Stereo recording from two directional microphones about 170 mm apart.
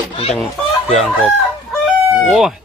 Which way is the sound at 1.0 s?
Centre (ahead or behind).